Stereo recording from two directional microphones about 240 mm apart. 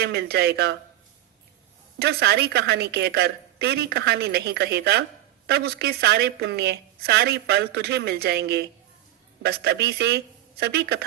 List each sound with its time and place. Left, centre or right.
0.0 s a woman's voice: right
2.0 s a woman's voice: right